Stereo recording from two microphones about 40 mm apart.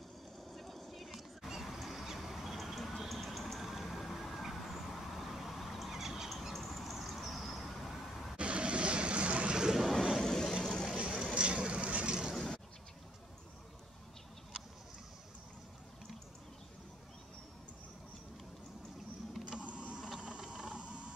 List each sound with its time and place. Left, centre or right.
0.5 s vehicle: centre
6.3 s vehicle: centre
8.4 s waves: right
10.1 s vehicle: centre
11.3 s vehicle: right
19.6 s power windows: right
20.2 s a sound: right